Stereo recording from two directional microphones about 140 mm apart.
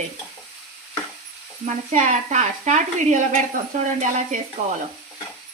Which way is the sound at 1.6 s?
60° right (ahead or behind).